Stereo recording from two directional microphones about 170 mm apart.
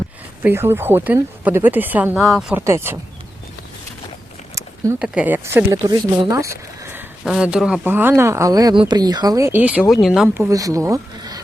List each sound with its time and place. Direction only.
0.4 s a woman's voice: 15° right (ahead or behind)
2.6 s speech: 15° right (ahead or behind)
4.9 s speech: 5° right (ahead or behind)
5.7 s speech: 25° right (ahead or behind)
7.3 s a woman's voice: 5° right (ahead or behind)
10.2 s speech: 15° right (ahead or behind)